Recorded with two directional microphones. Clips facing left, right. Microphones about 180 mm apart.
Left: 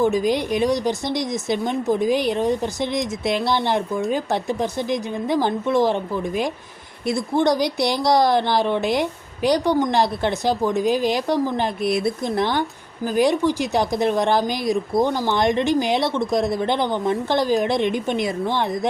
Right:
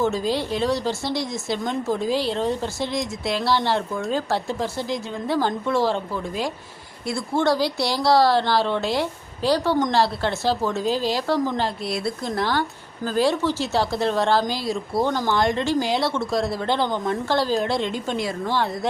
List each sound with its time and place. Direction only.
0.0 s a woman's voice: 15° left (ahead or behind)